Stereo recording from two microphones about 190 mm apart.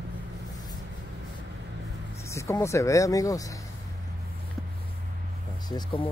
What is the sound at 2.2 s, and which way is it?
Speech, 15° left (ahead or behind).